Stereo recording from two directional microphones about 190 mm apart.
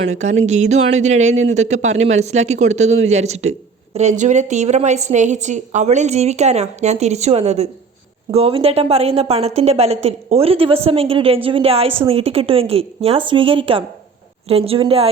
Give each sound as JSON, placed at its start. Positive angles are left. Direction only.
{"t": 0.1, "sound": "a woman's voice", "side_deg": -40}